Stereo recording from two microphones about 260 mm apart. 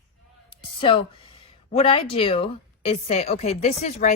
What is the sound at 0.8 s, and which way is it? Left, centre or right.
Speech, centre.